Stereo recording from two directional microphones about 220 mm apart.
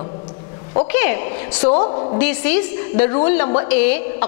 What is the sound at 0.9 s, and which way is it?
Speech, 15° left (ahead or behind).